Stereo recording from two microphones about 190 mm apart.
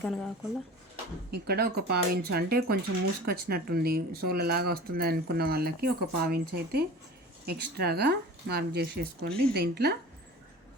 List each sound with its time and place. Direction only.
0.0 s speech: centre (ahead or behind)
1.3 s speech: 55° right (ahead or behind)